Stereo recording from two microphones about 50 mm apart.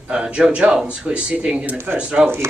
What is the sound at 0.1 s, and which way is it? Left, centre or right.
Speech, centre.